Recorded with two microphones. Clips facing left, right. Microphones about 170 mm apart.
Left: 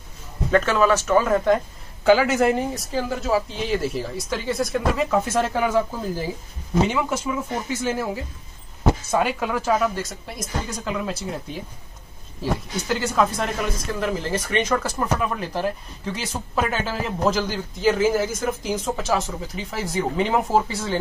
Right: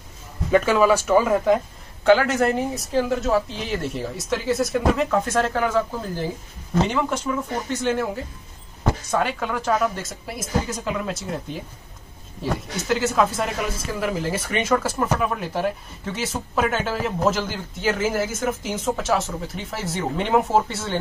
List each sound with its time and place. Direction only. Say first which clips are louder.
0.5 s speech: right 1 dB; 10° right (ahead or behind)